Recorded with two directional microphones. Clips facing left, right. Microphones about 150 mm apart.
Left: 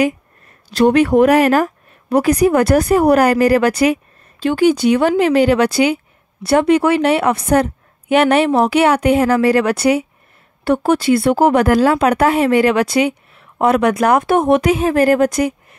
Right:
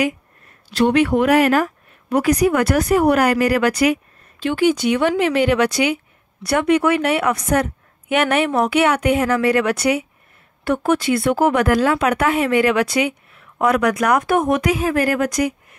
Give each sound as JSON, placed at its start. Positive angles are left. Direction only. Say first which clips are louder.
{"t": 0.7, "sound": "speech", "louder": "left 4 dB", "side_deg": 40}